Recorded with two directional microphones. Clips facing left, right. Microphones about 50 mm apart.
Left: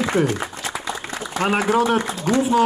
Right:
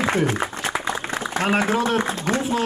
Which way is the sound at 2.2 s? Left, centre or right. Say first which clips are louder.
Left 4 dB; right.